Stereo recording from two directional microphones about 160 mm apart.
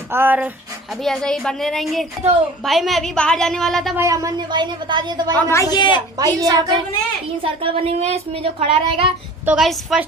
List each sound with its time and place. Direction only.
0.1 s speech: 10° right (ahead or behind)
1.0 s a woman's voice: centre (ahead or behind)
3.9 s a woman's voice: 20° right (ahead or behind)
5.5 s a woman's voice: 20° left (ahead or behind)
6.1 s a woman's voice: 25° right (ahead or behind)
7.4 s speech: 35° right (ahead or behind)
9.5 s a woman's voice: centre (ahead or behind)